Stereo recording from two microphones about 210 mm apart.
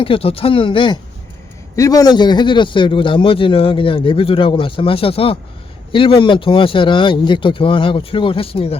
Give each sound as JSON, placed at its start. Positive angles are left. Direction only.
{"t": 0.0, "sound": "a man's voice", "side_deg": 25}